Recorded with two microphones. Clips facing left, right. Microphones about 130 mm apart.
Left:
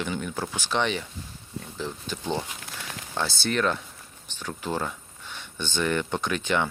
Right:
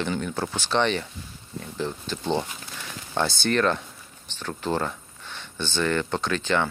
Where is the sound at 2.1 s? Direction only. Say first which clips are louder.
Right 3 dB; 5° left (ahead or behind).